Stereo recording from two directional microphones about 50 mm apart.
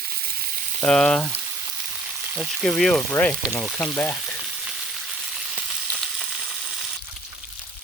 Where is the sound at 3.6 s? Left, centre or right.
Left.